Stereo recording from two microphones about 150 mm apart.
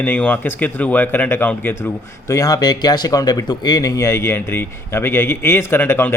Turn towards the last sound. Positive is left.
turn(degrees=15)  # may be behind; listen again after turning